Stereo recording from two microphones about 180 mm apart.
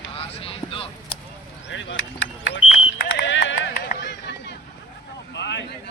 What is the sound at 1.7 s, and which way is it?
Speech, 90° left.